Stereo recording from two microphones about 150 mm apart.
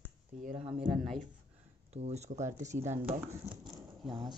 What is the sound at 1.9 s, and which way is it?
Speech, 45° right (ahead or behind).